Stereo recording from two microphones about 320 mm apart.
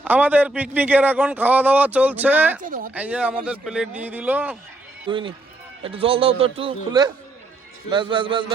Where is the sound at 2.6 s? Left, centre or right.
Right.